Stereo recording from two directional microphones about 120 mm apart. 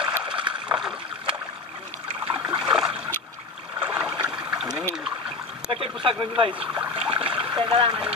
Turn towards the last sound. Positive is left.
turn(degrees=-40)  # may be behind; listen again after turning